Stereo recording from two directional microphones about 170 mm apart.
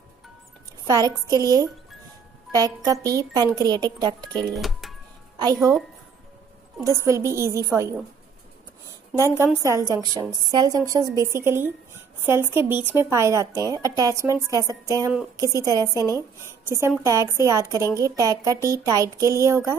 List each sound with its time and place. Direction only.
0.8 s a woman's voice: 20° right (ahead or behind)
4.6 s music: centre (ahead or behind)
5.4 s a woman's voice: 20° right (ahead or behind)
6.8 s speech: 15° right (ahead or behind)
9.2 s a woman's voice: 15° right (ahead or behind)